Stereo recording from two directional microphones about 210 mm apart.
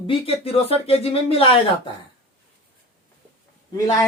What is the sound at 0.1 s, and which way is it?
Speech, 25° left (ahead or behind).